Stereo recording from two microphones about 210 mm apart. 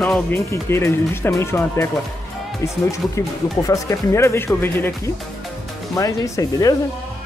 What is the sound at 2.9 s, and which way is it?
Speech, 15° left (ahead or behind).